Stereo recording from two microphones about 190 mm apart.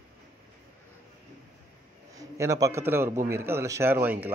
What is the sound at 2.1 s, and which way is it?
A man's voice, 15° right (ahead or behind).